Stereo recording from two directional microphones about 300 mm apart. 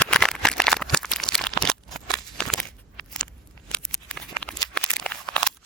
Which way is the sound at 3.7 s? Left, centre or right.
Centre.